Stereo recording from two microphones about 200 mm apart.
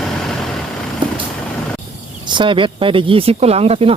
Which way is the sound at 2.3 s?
25° right (ahead or behind).